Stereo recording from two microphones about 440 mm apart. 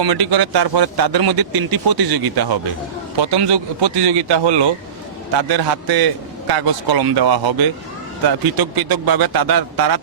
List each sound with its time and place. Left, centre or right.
0.0 s a man's voice: right